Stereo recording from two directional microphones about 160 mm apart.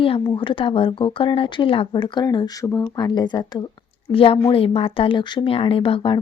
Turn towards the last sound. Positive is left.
turn(degrees=35)  # may be behind; listen again after turning